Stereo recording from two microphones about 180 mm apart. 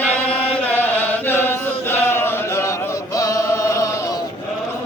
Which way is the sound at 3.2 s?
20° left (ahead or behind).